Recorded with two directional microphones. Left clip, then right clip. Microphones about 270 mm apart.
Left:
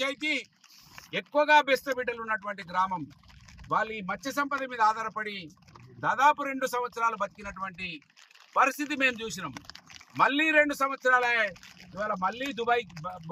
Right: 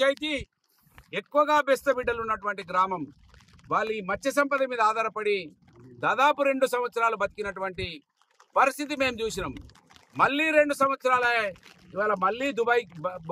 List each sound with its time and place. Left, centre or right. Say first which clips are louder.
0.0 s speech: right 4 dB; centre